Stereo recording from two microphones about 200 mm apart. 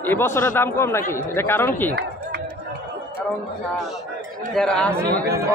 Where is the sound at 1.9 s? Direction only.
55° right (ahead or behind).